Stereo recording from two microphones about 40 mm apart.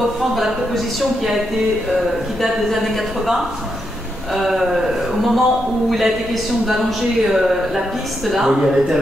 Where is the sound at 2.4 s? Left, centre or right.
Centre.